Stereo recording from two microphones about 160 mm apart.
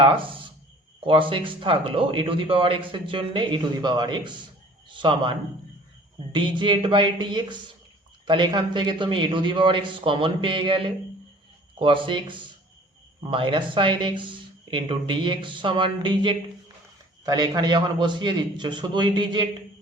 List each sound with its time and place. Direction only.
0.0 s a man's voice: 30° right (ahead or behind)